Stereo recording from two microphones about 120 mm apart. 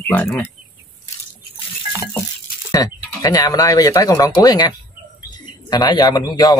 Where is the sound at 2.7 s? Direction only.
30° left (ahead or behind).